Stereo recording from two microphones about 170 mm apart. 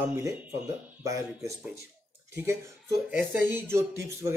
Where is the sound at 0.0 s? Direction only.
15° right (ahead or behind).